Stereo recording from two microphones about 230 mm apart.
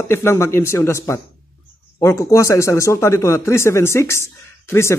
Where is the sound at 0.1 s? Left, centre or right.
Centre.